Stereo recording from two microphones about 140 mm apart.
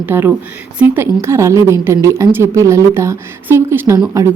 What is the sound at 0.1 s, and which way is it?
Speech, 15° right (ahead or behind).